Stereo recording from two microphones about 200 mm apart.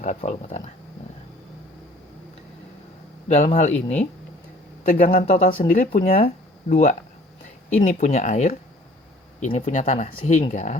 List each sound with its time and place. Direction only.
0.0 s speech: 35° left (ahead or behind)
3.2 s speech: 35° left (ahead or behind)
5.2 s speech: 35° left (ahead or behind)
5.5 s speech: 45° left (ahead or behind)